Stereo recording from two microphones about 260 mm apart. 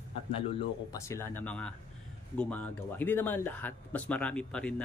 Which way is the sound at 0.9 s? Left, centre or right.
Centre.